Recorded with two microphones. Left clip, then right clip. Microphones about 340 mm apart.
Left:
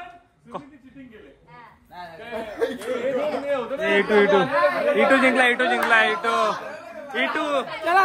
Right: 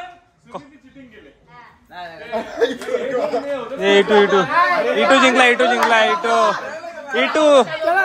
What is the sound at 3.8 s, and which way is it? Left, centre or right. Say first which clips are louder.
A man's voice: right 6 dB; centre.